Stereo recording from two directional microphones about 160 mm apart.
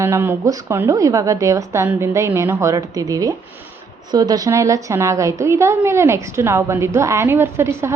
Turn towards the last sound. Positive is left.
turn(degrees=-15)  # may be behind; listen again after turning